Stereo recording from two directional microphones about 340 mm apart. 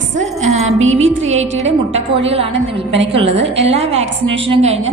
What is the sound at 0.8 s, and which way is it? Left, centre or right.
Speech, right.